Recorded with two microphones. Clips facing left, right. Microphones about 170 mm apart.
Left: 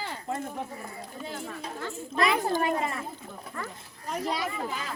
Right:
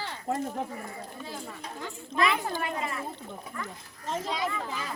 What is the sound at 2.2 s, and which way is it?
Speech, 40° left (ahead or behind).